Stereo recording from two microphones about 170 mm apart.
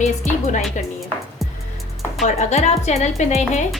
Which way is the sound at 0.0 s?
45° left (ahead or behind).